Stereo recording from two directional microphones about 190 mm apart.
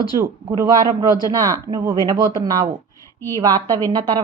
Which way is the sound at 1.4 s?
15° right (ahead or behind).